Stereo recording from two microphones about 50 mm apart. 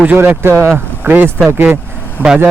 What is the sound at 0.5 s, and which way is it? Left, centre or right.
Speech, right.